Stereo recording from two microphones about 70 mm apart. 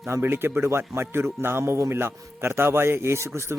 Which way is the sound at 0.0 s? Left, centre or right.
Right.